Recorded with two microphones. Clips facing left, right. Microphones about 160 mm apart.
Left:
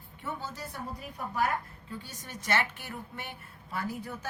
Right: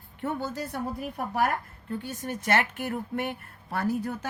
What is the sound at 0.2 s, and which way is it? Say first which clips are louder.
A woman's voice: right 8 dB; 55° right (ahead or behind).